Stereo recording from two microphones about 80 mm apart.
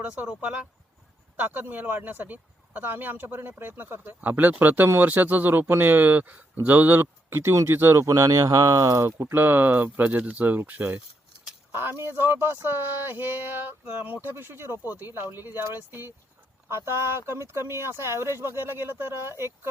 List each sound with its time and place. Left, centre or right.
0.0 s speech: centre; by 9.0 s right
9.0 s speech: right